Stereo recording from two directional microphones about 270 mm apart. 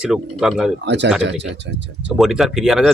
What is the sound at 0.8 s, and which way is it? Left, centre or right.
A man's voice, right.